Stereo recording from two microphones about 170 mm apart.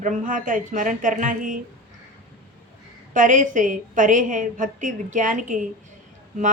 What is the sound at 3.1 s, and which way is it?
Speech, 50° right (ahead or behind).